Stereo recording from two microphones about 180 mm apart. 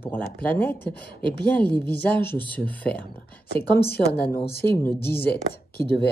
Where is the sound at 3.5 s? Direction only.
60° left (ahead or behind).